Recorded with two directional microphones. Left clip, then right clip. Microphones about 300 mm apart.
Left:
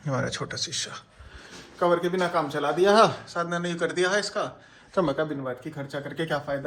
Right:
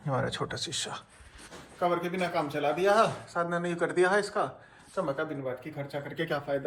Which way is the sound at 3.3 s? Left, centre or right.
Centre.